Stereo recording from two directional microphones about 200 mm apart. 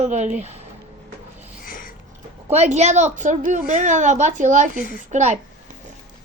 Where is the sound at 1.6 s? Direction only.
45° left (ahead or behind).